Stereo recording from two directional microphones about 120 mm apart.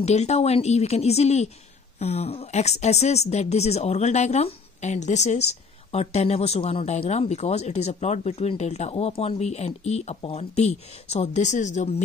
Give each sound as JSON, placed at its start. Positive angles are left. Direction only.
{"t": 0.0, "sound": "speech", "side_deg": 70}